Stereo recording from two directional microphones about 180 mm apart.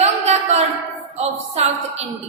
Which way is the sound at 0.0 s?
40° right (ahead or behind).